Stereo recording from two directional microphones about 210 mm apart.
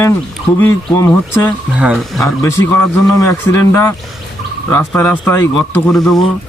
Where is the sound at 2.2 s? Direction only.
15° left (ahead or behind).